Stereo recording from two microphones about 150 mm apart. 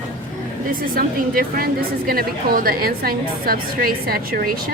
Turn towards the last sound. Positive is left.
turn(degrees=-80)